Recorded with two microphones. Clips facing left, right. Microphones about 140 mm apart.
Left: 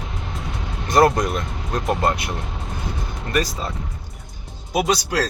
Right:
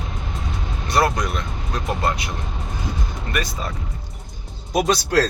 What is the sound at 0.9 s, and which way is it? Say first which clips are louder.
Speech: left 4 dB; 45° left (ahead or behind).